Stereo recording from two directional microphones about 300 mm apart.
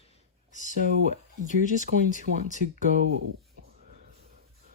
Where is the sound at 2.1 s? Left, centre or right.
Left.